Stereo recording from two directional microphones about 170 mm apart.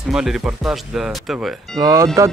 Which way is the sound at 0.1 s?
5° right (ahead or behind).